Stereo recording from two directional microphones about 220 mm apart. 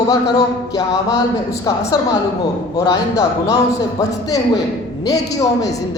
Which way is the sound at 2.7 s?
15° left (ahead or behind).